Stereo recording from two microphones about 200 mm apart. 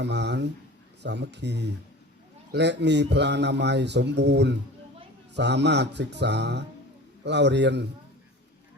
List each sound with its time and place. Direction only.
0.0 s speech: 60° right (ahead or behind)